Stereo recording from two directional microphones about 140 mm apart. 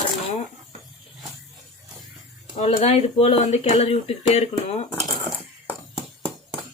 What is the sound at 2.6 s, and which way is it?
Speech, 50° left (ahead or behind).